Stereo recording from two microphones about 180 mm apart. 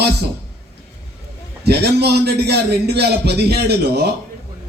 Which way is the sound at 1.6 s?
65° right (ahead or behind).